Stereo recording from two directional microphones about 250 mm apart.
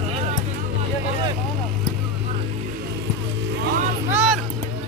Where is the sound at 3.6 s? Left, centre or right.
Right.